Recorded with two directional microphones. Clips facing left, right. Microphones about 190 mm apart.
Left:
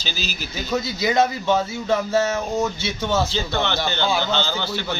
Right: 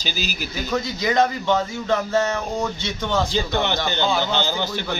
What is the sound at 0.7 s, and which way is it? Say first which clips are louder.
Speech: left 1 dB; 10° left (ahead or behind).